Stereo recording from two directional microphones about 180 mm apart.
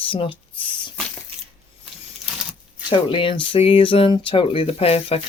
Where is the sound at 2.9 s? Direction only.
30° left (ahead or behind).